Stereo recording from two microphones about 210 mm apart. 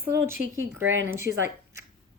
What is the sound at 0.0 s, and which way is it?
Speech, 10° right (ahead or behind).